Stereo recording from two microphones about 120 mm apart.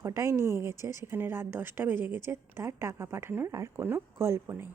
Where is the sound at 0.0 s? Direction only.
25° right (ahead or behind).